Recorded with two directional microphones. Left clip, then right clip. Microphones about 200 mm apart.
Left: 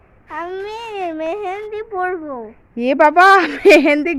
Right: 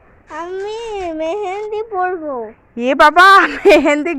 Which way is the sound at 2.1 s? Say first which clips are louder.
Right 4 dB; 30° left (ahead or behind).